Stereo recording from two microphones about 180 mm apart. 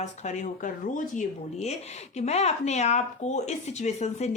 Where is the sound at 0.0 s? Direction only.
40° left (ahead or behind).